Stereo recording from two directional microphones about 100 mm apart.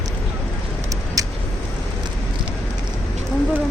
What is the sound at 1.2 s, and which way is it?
Vehicle, 35° right (ahead or behind).